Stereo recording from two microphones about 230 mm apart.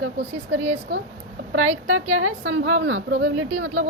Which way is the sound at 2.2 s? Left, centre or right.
Right.